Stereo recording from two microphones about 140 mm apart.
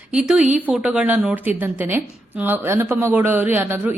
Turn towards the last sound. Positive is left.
turn(degrees=-15)  # may be behind; listen again after turning